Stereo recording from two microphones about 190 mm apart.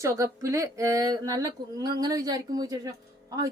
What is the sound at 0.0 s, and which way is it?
A woman's voice, 15° right (ahead or behind).